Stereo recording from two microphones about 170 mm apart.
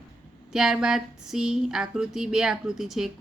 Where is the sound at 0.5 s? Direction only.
5° right (ahead or behind).